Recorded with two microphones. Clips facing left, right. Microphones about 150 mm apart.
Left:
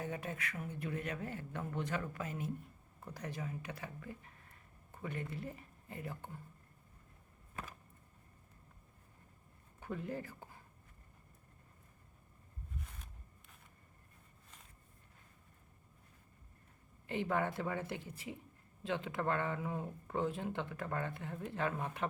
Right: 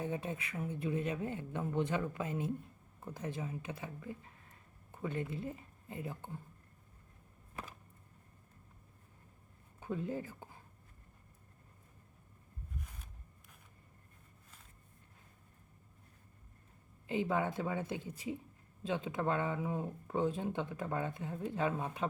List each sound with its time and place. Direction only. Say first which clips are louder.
0.0 s speech: right 3 dB; 20° right (ahead or behind)
5.3 s a woman's voice: right 3 dB; 20° right (ahead or behind)
9.8 s speech: right 3 dB; 15° right (ahead or behind)
17.1 s speech: right 2 dB; 15° right (ahead or behind)